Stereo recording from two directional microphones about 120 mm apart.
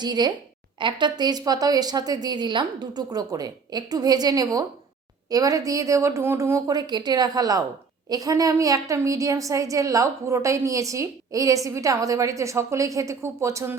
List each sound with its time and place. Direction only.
0.0 s a woman's voice: 35° right (ahead or behind)